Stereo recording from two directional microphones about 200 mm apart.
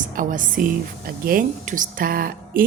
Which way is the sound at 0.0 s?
40° right (ahead or behind).